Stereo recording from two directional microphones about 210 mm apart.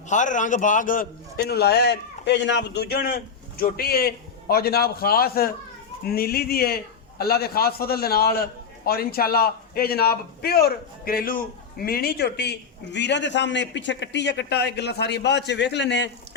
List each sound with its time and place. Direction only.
0.1 s a man's voice: 35° left (ahead or behind); by 16.0 s 55° left (ahead or behind)